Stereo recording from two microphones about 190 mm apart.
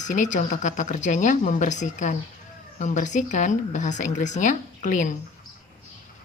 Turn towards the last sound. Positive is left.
turn(degrees=40)  # may be behind; listen again after turning